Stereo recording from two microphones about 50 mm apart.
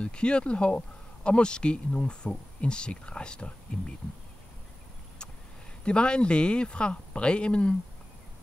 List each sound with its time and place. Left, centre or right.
0.0 s speech: left
5.9 s speech: left